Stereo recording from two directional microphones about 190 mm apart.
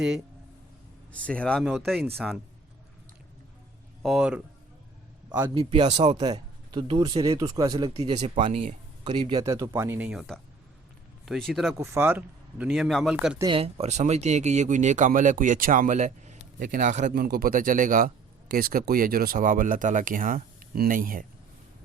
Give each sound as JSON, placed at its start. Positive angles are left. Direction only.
{"t": 1.1, "sound": "speech", "side_deg": 5}
{"t": 4.0, "sound": "speech", "side_deg": 0}
{"t": 5.5, "sound": "speech", "side_deg": -30}
{"t": 6.1, "sound": "speech", "side_deg": -20}
{"t": 11.7, "sound": "a man's voice", "side_deg": -15}
{"t": 13.4, "sound": "speech", "side_deg": -30}
{"t": 17.2, "sound": "a man's voice", "side_deg": -55}